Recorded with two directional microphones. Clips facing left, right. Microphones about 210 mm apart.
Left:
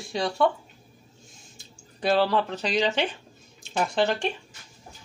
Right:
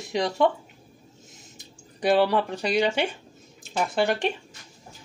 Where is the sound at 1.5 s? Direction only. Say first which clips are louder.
Right 2 dB; 15° right (ahead or behind).